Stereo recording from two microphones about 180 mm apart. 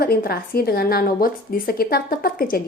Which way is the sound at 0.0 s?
55° left (ahead or behind).